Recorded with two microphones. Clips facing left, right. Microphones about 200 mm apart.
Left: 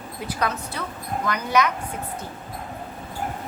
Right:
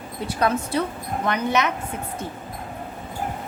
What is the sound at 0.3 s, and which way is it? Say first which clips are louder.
A woman's voice: right 5 dB; 30° right (ahead or behind).